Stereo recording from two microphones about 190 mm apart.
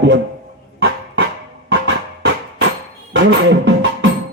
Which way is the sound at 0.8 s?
65° right (ahead or behind).